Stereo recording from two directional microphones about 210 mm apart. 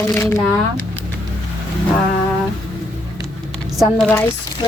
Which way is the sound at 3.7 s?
5° left (ahead or behind).